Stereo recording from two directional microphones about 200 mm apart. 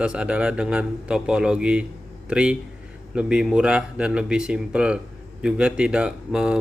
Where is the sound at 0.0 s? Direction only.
5° right (ahead or behind).